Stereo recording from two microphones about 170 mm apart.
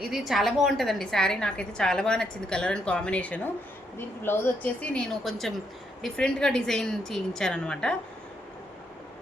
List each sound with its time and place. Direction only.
0.1 s a woman's voice: centre (ahead or behind)